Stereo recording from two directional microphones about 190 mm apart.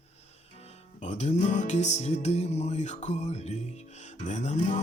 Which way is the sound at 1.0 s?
40° left (ahead or behind).